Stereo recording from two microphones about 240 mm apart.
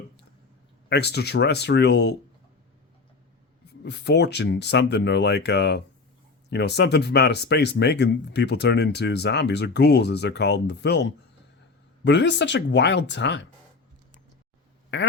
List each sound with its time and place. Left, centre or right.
0.9 s speech: left
3.8 s speech: left
14.9 s speech: left